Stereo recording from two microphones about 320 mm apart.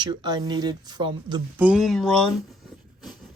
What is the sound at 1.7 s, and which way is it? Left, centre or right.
Speech, centre.